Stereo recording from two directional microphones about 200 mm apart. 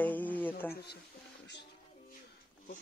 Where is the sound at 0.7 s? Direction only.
55° left (ahead or behind).